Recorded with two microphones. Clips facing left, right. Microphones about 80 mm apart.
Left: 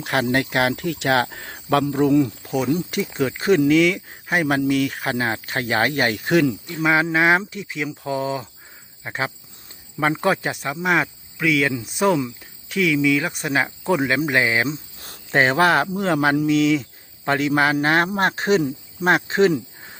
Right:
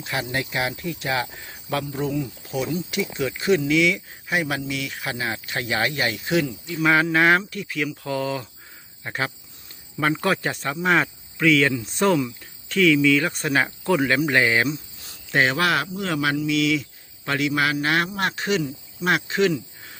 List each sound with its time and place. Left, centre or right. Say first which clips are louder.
0.0 s speech: left 7 dB; left
2.4 s cricket: left 4 dB; left
2.9 s a man's voice: left 3 dB; left
6.4 s speech: left 7 dB; left
6.8 s speech: even; centre
14.9 s cricket: left 4 dB; left
16.0 s a man's voice: left 5 dB; left